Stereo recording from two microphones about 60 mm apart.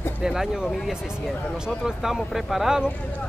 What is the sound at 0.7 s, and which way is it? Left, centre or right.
Speech, centre.